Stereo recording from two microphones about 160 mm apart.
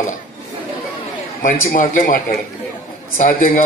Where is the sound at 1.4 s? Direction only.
65° left (ahead or behind).